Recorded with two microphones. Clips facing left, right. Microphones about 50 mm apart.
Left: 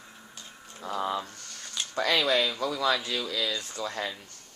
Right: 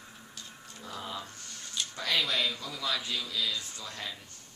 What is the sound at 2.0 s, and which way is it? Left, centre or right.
Speech, left.